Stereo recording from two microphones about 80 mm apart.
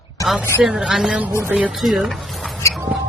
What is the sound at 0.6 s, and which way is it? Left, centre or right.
A woman's voice, centre.